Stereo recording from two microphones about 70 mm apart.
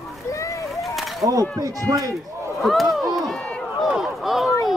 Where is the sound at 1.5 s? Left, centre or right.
Right.